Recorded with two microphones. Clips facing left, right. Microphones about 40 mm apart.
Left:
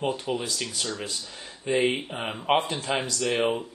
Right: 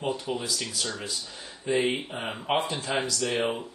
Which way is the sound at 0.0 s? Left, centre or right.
Left.